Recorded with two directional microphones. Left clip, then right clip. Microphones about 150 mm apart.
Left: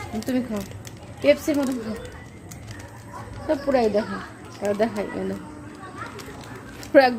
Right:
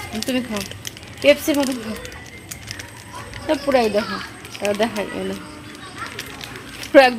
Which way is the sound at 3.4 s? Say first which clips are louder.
Right 3 dB; 25° right (ahead or behind).